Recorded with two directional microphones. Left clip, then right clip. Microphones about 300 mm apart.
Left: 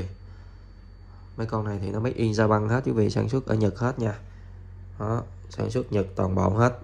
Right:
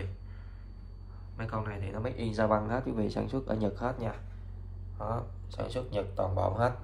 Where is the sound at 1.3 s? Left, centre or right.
Centre.